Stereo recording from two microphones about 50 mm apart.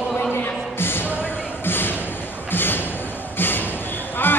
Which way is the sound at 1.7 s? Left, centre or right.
Left.